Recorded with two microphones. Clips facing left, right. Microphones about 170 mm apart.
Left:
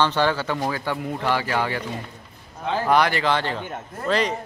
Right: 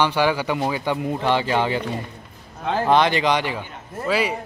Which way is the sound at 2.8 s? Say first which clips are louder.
Right 2 dB; 20° right (ahead or behind).